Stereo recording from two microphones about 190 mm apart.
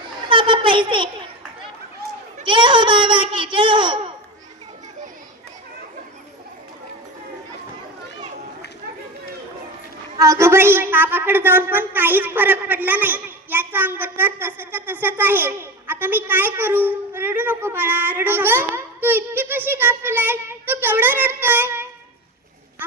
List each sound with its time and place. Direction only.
0.3 s a child's voice: 25° right (ahead or behind)
2.4 s a child's voice: 25° right (ahead or behind)
10.2 s a woman's voice: 15° right (ahead or behind)